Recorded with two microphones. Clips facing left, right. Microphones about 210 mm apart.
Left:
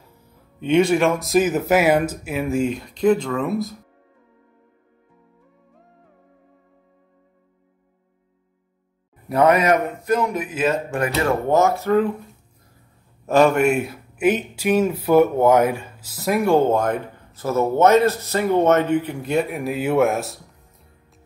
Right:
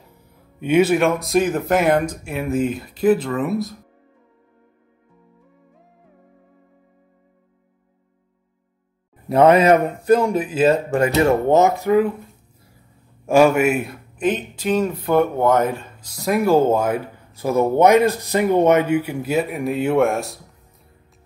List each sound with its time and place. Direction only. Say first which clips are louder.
0.6 s speech: right 1 dB; 5° right (ahead or behind)
9.3 s speech: right 4 dB; 25° right (ahead or behind)
13.3 s speech: right 1 dB; 10° right (ahead or behind)